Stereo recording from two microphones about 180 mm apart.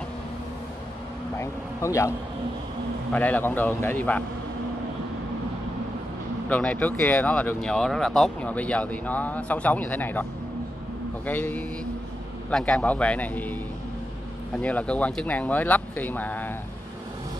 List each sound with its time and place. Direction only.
1.4 s speech: 15° left (ahead or behind)
6.5 s speech: 10° left (ahead or behind)
11.2 s speech: 10° left (ahead or behind)